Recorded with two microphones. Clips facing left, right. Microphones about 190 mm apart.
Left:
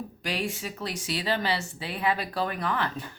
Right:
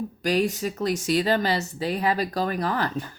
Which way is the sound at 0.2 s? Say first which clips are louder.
Right 9 dB; 40° right (ahead or behind).